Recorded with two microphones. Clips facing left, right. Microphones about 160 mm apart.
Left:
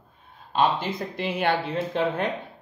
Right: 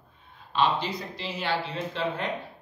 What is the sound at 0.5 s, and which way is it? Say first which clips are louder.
Speech: left 2 dB; 50° left (ahead or behind).